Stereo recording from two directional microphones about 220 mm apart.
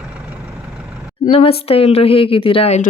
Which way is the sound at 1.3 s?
25° left (ahead or behind).